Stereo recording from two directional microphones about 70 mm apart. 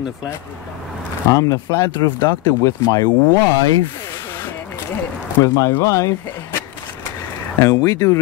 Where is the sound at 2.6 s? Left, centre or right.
Left.